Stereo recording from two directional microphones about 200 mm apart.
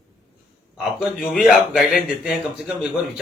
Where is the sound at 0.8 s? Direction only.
Centre (ahead or behind).